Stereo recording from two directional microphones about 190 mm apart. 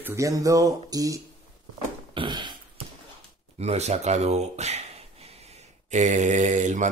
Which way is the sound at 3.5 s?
35° right (ahead or behind).